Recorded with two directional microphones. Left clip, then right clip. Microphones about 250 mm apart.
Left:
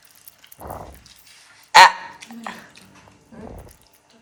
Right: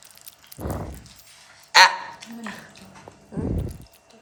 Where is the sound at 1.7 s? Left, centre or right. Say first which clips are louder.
Left 4 dB; centre.